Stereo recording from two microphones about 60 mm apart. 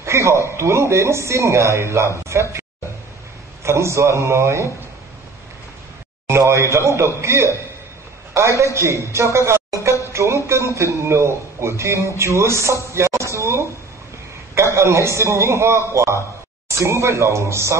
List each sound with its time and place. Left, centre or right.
0.0 s a sound: right
0.6 s speech: right
3.6 s speech: right
6.2 s speech: right
12.9 s music: right
13.3 s a sound: right
14.5 s a man's voice: right